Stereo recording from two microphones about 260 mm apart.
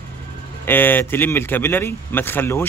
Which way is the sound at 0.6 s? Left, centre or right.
Centre.